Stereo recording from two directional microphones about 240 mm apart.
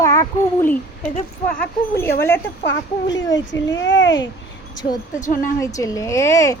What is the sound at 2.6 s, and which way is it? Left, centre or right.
Speech, left.